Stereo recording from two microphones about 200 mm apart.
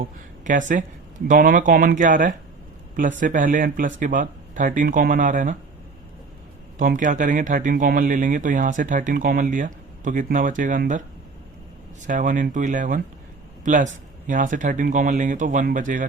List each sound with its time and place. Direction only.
0.0 s speech: 40° right (ahead or behind)
6.7 s speech: 40° right (ahead or behind)
12.0 s speech: 40° right (ahead or behind)